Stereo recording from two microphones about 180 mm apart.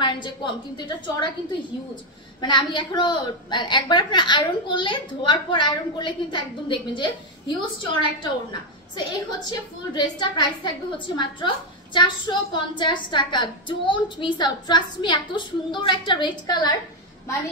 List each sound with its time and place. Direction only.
0.0 s a woman's voice: 25° left (ahead or behind)
2.4 s a woman's voice: 25° left (ahead or behind)